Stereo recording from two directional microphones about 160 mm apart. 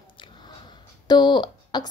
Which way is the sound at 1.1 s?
25° left (ahead or behind).